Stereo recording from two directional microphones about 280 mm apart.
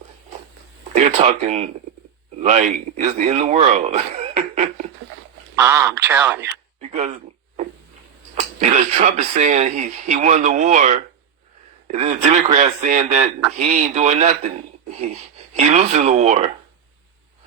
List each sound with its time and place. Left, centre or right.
0.9 s speech: right
5.5 s speech: centre
6.9 s a sound: right
8.4 s speech: right